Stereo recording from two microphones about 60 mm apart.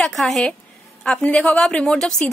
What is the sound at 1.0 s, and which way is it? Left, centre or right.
A woman's voice, centre.